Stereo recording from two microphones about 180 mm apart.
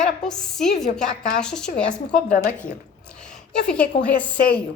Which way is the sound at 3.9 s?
90° left.